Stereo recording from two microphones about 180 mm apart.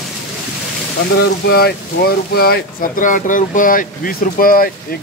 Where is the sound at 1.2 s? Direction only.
60° left (ahead or behind).